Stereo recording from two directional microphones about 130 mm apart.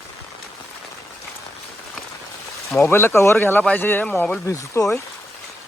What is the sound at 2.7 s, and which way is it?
A man's voice, 15° left (ahead or behind).